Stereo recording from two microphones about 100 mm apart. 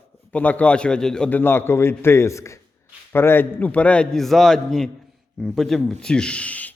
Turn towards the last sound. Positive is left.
turn(degrees=15)  # may be behind; listen again after turning